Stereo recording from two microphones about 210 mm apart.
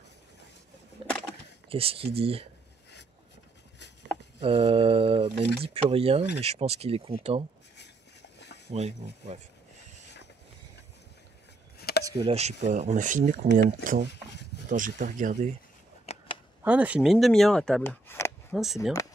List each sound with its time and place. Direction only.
1.0 s a sound: 25° right (ahead or behind)
1.7 s speech: 25° right (ahead or behind)
4.4 s speech: 25° right (ahead or behind)
8.6 s speech: 30° right (ahead or behind)
12.0 s speech: 20° right (ahead or behind); by 13.7 s 40° right (ahead or behind)
13.8 s speech: 50° right (ahead or behind)
16.1 s a sound: 30° left (ahead or behind)
16.6 s speech: 5° right (ahead or behind); by 18.3 s 10° left (ahead or behind)
18.5 s speech: centre (ahead or behind)